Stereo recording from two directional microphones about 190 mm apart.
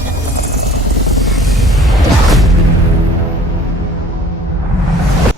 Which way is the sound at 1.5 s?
Centre (ahead or behind).